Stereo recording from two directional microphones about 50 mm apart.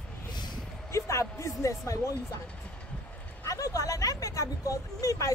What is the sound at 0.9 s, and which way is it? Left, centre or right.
Speech, left.